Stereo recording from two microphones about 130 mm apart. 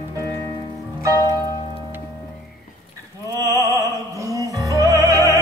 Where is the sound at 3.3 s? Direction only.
25° right (ahead or behind).